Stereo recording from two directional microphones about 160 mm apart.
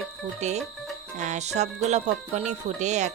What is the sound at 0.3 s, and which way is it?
Speech, 45° right (ahead or behind).